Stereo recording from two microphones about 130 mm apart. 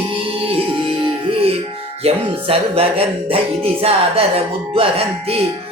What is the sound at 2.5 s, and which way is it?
Music, 50° right (ahead or behind).